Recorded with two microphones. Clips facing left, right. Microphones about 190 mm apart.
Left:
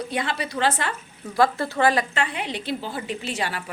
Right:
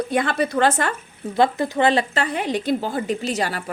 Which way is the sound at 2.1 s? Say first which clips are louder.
Right 5 dB; 40° right (ahead or behind).